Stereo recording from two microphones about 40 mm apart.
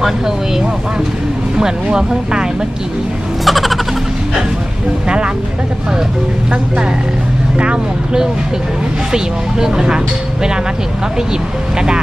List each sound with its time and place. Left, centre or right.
1.6 s speech: centre
3.4 s music: centre
5.0 s speech: right
7.5 s speech: right
9.1 s speech: centre